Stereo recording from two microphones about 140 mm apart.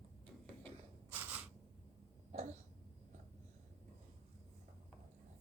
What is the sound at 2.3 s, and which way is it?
Throat clearing, 55° right (ahead or behind).